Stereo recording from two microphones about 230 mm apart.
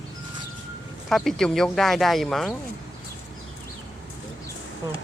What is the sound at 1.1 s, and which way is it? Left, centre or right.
Speech, centre.